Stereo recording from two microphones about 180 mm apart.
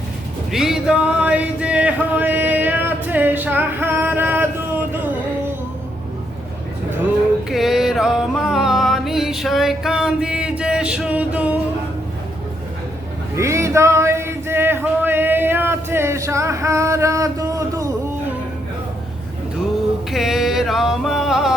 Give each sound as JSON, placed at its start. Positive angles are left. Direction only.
{"t": 0.5, "sound": "music", "side_deg": -5}
{"t": 7.5, "sound": "music", "side_deg": 0}
{"t": 13.3, "sound": "music", "side_deg": -15}
{"t": 20.1, "sound": "music", "side_deg": 0}